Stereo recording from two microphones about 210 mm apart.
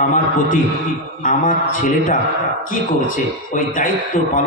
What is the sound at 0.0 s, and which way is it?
A man's voice, 40° left (ahead or behind).